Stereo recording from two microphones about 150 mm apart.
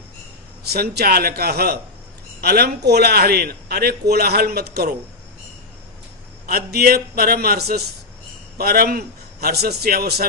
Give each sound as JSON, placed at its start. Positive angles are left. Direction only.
{"t": 0.7, "sound": "a man's voice", "side_deg": -90}
{"t": 6.4, "sound": "a man's voice", "side_deg": -90}